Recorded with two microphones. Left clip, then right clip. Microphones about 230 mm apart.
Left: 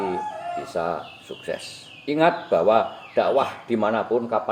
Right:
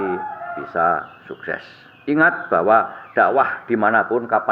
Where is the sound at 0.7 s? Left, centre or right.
Right.